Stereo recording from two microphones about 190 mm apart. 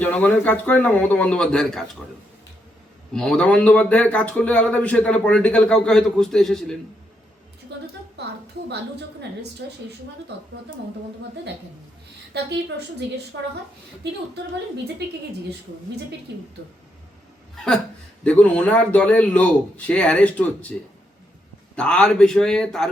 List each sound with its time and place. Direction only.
0.0 s a man's voice: 10° left (ahead or behind)
3.1 s speech: 5° left (ahead or behind)
7.7 s a woman's voice: 65° right (ahead or behind)
9.6 s a woman's voice: 60° right (ahead or behind)
12.3 s a woman's voice: 60° right (ahead or behind)
14.0 s a woman's voice: 60° right (ahead or behind)
18.2 s a man's voice: 5° left (ahead or behind)
21.8 s speech: 5° left (ahead or behind)